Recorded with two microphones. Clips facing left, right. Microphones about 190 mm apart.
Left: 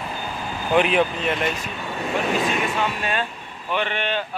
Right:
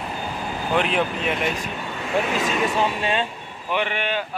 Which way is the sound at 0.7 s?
5° left (ahead or behind).